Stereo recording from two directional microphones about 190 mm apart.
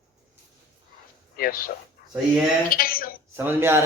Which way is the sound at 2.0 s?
50° left (ahead or behind).